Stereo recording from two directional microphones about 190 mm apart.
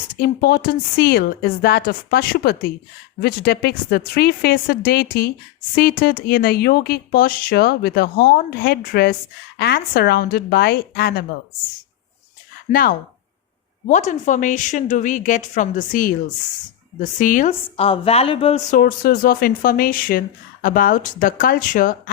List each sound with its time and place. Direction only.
0.2 s a woman's voice: 50° left (ahead or behind)
12.7 s a woman's voice: 50° left (ahead or behind)
17.7 s a woman's voice: 30° left (ahead or behind)
18.7 s a woman's voice: 45° left (ahead or behind)